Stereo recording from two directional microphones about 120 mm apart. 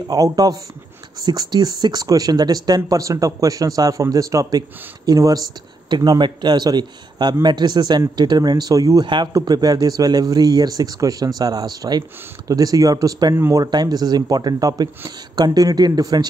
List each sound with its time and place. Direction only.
0.1 s speech: 30° right (ahead or behind)
9.0 s speech: 40° right (ahead or behind)